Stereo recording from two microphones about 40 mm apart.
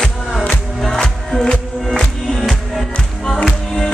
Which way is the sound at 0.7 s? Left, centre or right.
Centre.